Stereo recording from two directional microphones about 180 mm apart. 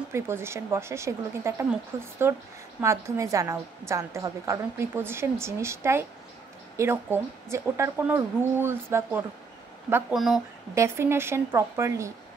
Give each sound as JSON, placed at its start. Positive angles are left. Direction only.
{"t": 0.1, "sound": "a woman's voice", "side_deg": -15}
{"t": 10.1, "sound": "speech", "side_deg": 0}
{"t": 10.7, "sound": "a woman's voice", "side_deg": -15}